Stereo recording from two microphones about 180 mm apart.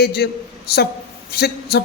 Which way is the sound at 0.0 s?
60° left (ahead or behind).